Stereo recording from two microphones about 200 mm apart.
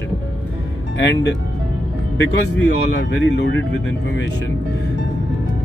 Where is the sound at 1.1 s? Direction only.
60° left (ahead or behind).